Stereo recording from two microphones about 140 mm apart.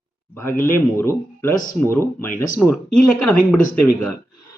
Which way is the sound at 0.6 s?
20° left (ahead or behind).